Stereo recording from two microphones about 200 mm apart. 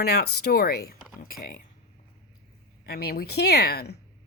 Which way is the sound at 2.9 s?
50° left (ahead or behind).